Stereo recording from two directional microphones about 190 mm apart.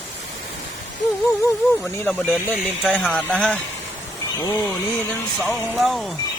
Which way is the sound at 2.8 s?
Centre (ahead or behind).